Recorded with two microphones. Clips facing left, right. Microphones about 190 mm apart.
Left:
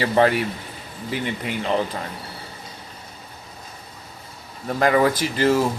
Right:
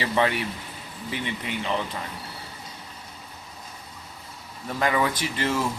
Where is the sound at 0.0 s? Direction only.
35° left (ahead or behind).